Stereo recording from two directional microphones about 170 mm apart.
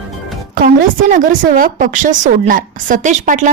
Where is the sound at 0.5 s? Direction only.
50° right (ahead or behind).